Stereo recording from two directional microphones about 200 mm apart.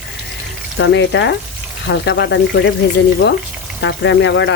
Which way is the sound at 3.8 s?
65° left (ahead or behind).